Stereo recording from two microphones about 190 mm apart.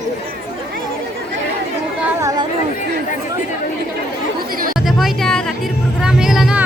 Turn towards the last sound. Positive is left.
turn(degrees=0)  # may be behind; listen again after turning